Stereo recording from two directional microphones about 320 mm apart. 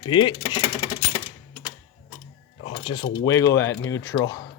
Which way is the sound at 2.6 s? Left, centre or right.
Centre.